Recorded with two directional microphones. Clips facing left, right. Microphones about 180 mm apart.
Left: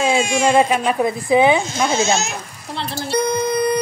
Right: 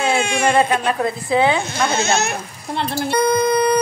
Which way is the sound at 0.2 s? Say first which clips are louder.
Left 2 dB; 60° right (ahead or behind).